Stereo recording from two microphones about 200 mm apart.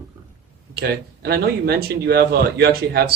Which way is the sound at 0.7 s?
50° right (ahead or behind).